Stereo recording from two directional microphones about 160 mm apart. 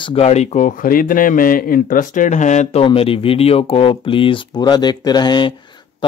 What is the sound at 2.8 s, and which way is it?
A man's voice, 35° left (ahead or behind).